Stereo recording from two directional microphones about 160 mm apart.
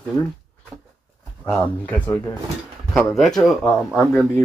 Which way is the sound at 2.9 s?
5° left (ahead or behind).